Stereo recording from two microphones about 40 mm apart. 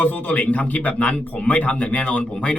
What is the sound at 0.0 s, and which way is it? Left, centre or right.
A man's voice, left.